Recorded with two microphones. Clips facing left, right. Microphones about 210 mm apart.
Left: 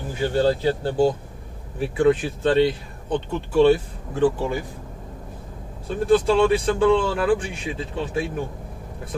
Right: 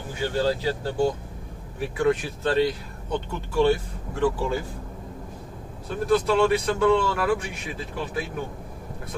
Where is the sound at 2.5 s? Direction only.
25° left (ahead or behind).